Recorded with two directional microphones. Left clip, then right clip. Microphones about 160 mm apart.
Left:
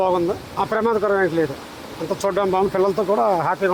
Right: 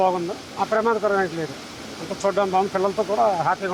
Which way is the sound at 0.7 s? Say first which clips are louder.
Left 1 dB; 90° left.